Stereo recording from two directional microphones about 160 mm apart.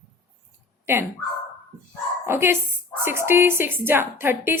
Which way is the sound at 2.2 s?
15° right (ahead or behind).